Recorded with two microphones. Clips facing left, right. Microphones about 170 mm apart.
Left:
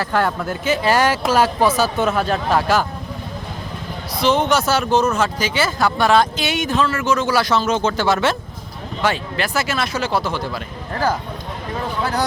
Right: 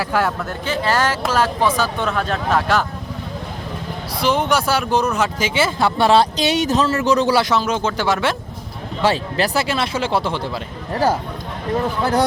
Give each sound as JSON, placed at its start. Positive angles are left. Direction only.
{"t": 0.0, "sound": "speech", "side_deg": -5}
{"t": 0.6, "sound": "speech", "side_deg": 10}
{"t": 4.2, "sound": "a man's voice", "side_deg": -10}
{"t": 7.4, "sound": "speech", "side_deg": -15}
{"t": 9.0, "sound": "speech", "side_deg": -30}